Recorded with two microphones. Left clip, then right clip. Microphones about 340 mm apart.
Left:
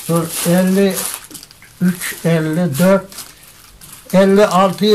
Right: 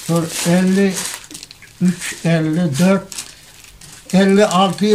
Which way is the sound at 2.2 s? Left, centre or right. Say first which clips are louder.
Left 1 dB; centre.